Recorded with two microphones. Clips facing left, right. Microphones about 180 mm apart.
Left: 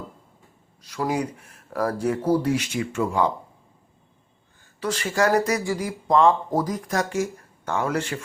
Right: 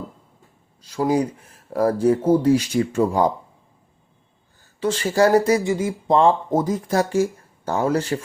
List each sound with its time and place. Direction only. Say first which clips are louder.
0.8 s speech: right 5 dB; 30° right (ahead or behind)
4.8 s speech: right 5 dB; 30° right (ahead or behind)